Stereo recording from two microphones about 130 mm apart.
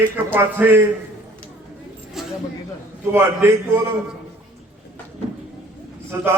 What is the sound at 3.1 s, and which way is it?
Speech, 20° right (ahead or behind).